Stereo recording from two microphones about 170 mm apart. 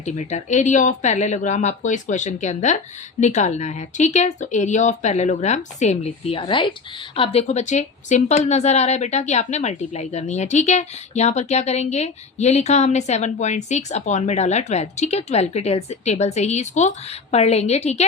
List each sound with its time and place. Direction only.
0.0 s a woman's voice: 45° left (ahead or behind)